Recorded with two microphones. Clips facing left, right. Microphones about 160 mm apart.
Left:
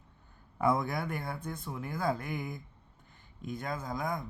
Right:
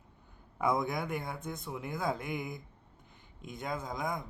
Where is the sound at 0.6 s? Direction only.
15° right (ahead or behind).